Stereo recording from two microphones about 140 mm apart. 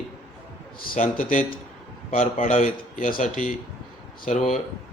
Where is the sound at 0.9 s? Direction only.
75° left (ahead or behind).